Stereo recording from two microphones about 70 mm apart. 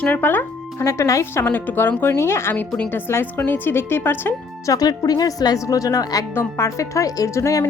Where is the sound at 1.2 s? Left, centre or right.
Left.